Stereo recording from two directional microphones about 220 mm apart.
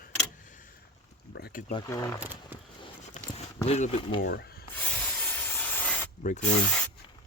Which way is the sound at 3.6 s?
30° left (ahead or behind).